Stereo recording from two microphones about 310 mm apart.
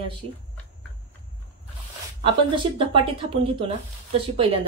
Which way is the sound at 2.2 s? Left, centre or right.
Centre.